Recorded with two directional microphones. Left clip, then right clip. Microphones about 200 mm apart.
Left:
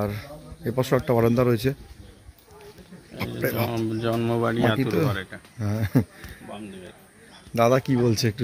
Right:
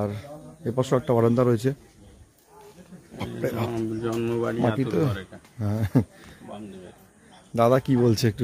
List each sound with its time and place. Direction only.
0.0 s speech: 5° right (ahead or behind)
3.2 s speech: 5° right (ahead or behind)
4.0 s speech: 65° left (ahead or behind)
4.8 s speech: 10° right (ahead or behind)
5.1 s speech: 10° left (ahead or behind)
5.6 s speech: 10° right (ahead or behind)
7.5 s speech: 10° right (ahead or behind)